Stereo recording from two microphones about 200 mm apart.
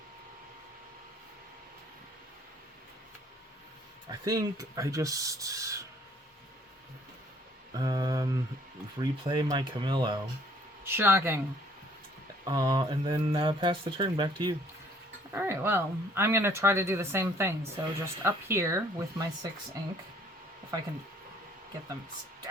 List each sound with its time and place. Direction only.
4.1 s speech: 15° right (ahead or behind)
7.7 s speech: 20° right (ahead or behind)
10.8 s speech: 10° right (ahead or behind)
12.5 s speech: 20° right (ahead or behind)
15.3 s speech: 10° right (ahead or behind)